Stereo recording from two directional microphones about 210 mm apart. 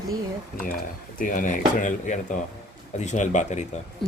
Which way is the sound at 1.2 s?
40° left (ahead or behind).